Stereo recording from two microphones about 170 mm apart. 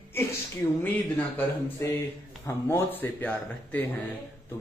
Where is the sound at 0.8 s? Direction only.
10° left (ahead or behind).